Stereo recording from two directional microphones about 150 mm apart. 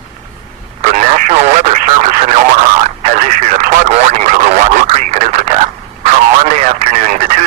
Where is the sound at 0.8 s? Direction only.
55° right (ahead or behind).